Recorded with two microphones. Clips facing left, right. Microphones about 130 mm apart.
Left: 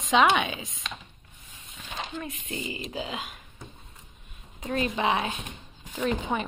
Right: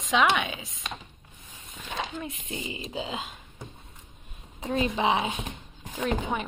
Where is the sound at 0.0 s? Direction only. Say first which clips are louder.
Left 2 dB; centre (ahead or behind).